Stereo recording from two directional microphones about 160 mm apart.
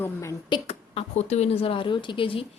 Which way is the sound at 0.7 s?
40° left (ahead or behind).